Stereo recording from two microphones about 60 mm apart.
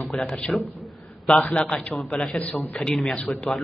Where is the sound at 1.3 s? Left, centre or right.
Left.